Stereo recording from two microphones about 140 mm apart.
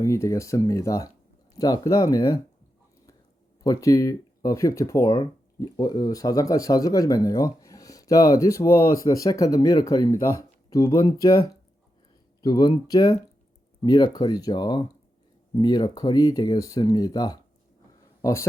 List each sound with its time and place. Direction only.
0.0 s speech: 20° left (ahead or behind)
3.6 s speech: 25° left (ahead or behind)